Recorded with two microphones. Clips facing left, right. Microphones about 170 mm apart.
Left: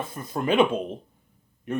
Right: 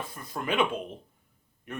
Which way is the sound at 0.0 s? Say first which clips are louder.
Left 7 dB; 20° left (ahead or behind).